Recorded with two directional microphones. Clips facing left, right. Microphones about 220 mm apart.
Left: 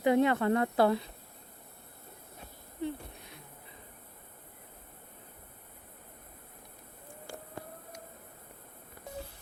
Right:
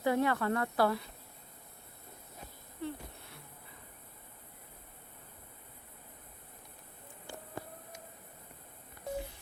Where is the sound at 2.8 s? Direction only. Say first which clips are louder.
Left 4 dB; 15° left (ahead or behind).